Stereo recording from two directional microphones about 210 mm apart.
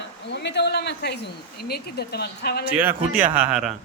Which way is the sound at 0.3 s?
55° left (ahead or behind).